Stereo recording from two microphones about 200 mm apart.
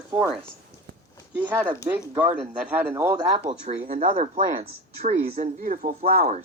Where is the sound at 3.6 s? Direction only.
45° right (ahead or behind).